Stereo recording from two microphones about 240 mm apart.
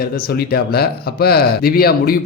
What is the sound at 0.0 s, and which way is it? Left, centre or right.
Speech, left.